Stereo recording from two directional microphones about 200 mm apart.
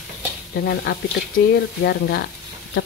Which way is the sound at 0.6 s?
50° left (ahead or behind).